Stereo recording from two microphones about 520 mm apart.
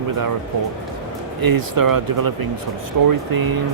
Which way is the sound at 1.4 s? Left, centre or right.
Right.